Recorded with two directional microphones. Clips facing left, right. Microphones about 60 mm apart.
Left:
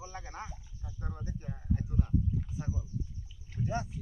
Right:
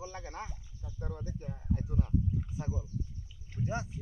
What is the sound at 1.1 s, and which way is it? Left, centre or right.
Speech, centre.